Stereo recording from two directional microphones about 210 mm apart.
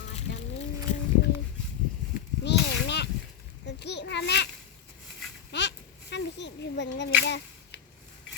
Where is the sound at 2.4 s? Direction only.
55° left (ahead or behind).